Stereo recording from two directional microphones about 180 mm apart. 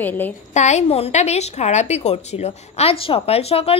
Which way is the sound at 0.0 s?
10° left (ahead or behind).